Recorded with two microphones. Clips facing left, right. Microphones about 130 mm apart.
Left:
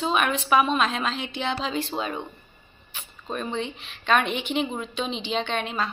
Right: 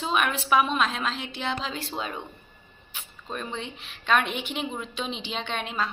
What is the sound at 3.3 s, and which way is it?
Speech, 5° right (ahead or behind).